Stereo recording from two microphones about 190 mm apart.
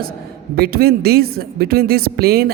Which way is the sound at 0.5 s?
55° right (ahead or behind).